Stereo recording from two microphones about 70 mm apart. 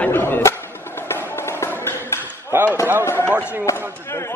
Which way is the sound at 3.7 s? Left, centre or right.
Right.